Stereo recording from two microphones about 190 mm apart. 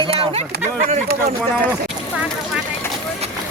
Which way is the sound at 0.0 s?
30° right (ahead or behind).